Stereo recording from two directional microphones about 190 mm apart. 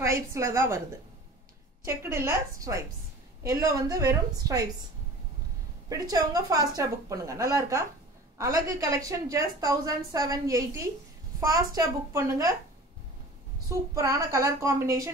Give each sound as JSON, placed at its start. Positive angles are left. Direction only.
{"t": 0.0, "sound": "a woman's voice", "side_deg": -15}
{"t": 1.9, "sound": "a woman's voice", "side_deg": -15}
{"t": 5.9, "sound": "a woman's voice", "side_deg": -20}
{"t": 13.7, "sound": "a woman's voice", "side_deg": -15}